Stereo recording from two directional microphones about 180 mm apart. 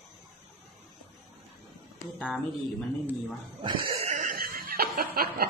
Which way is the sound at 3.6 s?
30° right (ahead or behind).